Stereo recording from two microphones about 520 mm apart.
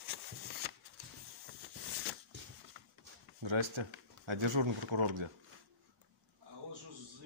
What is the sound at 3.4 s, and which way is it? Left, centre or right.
Speech, right.